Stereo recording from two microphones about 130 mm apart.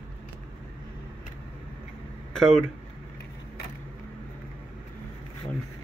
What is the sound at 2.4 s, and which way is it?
Speech, 5° left (ahead or behind).